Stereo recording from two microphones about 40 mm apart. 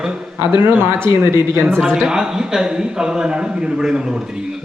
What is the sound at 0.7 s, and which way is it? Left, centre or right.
Speech, right.